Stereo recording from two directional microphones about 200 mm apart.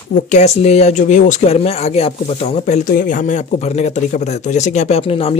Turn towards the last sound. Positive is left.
turn(degrees=30)  # may be behind; listen again after turning